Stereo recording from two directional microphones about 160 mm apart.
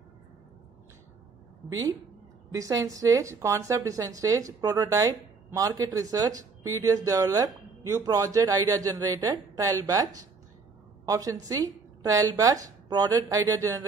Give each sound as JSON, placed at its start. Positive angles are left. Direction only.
{"t": 2.5, "sound": "a woman's voice", "side_deg": -20}